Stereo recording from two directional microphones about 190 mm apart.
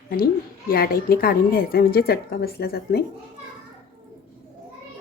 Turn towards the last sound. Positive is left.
turn(degrees=55)  # may be behind; listen again after turning